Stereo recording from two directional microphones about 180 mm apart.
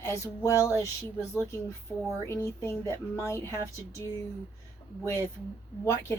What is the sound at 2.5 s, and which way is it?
Speech, 15° left (ahead or behind).